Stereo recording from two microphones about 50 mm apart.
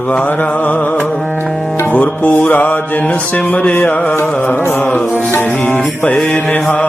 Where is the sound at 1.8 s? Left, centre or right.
Left.